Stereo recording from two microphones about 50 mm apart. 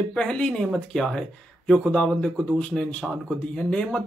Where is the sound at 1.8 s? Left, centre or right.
Left.